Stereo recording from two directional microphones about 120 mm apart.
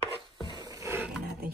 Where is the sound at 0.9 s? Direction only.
10° right (ahead or behind).